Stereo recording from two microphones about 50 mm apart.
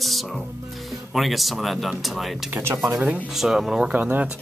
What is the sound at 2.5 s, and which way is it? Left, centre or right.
Speech, right.